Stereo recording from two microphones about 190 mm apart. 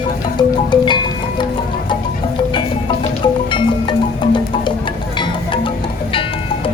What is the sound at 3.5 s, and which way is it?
Music, 25° left (ahead or behind).